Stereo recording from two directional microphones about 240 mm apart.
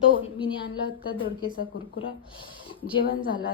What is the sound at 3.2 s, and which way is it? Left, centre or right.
Speech, left.